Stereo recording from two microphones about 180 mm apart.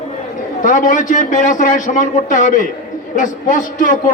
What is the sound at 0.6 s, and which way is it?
Speech, 45° left (ahead or behind).